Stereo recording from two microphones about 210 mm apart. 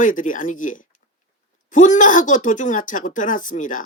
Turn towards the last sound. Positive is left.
turn(degrees=40)  # may be behind; listen again after turning